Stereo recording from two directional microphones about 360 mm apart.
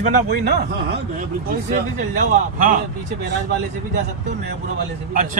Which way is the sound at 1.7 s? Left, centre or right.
Right.